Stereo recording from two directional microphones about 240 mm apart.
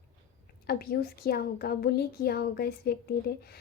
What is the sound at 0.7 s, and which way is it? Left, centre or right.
A woman's voice, left.